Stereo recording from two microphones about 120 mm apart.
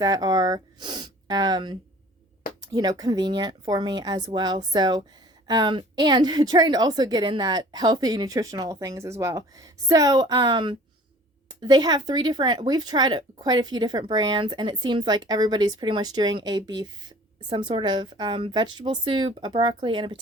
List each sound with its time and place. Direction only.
0.0 s speech: 35° right (ahead or behind)